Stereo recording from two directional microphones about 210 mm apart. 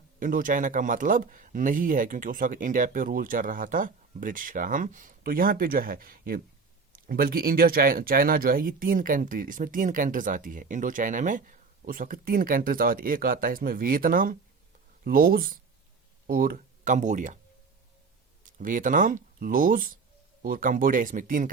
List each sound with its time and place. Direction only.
0.2 s speech: 40° right (ahead or behind)
18.6 s speech: 40° right (ahead or behind)